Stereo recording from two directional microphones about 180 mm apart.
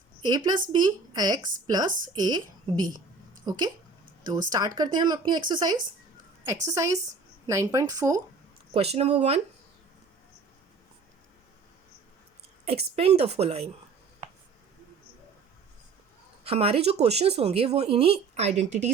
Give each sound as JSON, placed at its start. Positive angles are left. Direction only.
{"t": 0.3, "sound": "a woman's voice", "side_deg": -20}
{"t": 8.7, "sound": "speech", "side_deg": -35}
{"t": 12.6, "sound": "speech", "side_deg": -35}
{"t": 16.4, "sound": "speech", "side_deg": -35}